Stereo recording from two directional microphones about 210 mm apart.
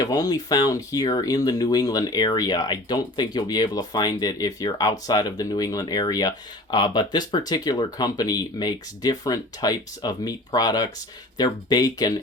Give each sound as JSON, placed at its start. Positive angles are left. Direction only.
{"t": 0.0, "sound": "speech", "side_deg": 20}